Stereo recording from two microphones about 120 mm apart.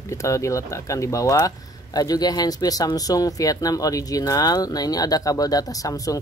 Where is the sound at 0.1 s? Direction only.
25° left (ahead or behind).